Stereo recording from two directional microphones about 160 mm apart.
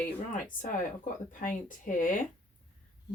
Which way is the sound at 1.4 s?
55° left (ahead or behind).